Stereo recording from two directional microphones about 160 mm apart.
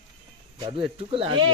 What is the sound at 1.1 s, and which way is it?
Speech, 35° right (ahead or behind).